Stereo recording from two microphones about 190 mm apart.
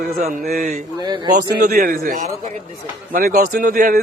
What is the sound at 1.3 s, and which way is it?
Speech, 50° right (ahead or behind).